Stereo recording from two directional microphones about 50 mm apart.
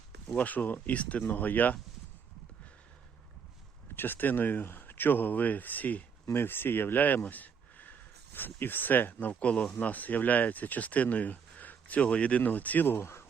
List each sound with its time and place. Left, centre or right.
0.3 s speech: left
3.9 s speech: left
6.3 s speech: left
7.3 s a sound: left
9.3 s speech: left
13.0 s speech: left